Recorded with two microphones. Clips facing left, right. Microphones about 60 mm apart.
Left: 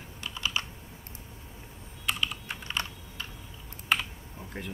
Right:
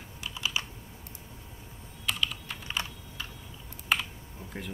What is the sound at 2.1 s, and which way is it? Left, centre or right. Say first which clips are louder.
Typing: left 1 dB; centre.